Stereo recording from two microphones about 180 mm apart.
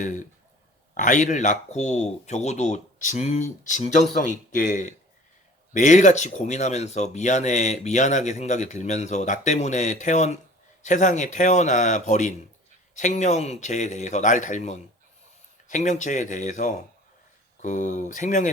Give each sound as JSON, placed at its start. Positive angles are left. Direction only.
{"t": 0.9, "sound": "speech", "side_deg": 45}